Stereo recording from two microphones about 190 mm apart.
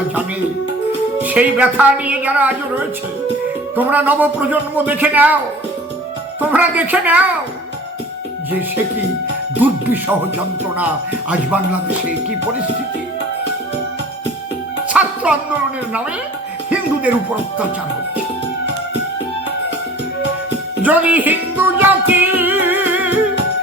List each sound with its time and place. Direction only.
1.2 s a woman's voice: 10° right (ahead or behind)
6.4 s a woman's voice: 10° right (ahead or behind)
9.6 s a woman's voice: 10° right (ahead or behind)
14.8 s music: 5° right (ahead or behind)
20.8 s music: 10° right (ahead or behind)